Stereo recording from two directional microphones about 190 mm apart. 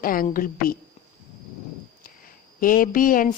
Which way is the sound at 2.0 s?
50° left (ahead or behind).